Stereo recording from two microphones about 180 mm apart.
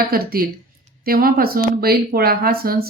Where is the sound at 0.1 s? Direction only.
55° right (ahead or behind).